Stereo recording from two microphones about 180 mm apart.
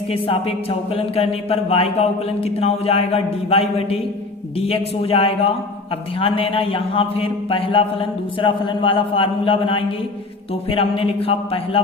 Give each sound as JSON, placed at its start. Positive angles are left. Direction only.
{"t": 0.1, "sound": "a man's voice", "side_deg": 30}